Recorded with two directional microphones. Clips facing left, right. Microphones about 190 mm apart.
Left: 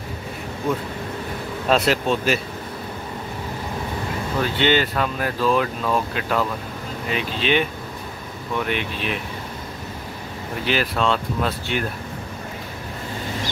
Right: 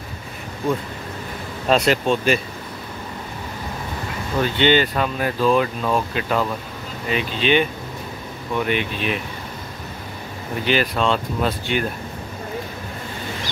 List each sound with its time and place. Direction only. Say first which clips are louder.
1.7 s speech: right 2 dB; centre (ahead or behind)
4.4 s speech: right 3 dB; centre (ahead or behind)
10.6 s speech: right 2 dB; centre (ahead or behind)